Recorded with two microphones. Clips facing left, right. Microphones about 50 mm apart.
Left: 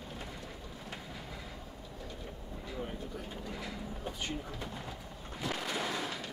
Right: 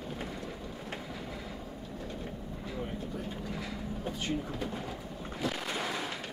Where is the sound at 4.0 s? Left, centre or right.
Centre.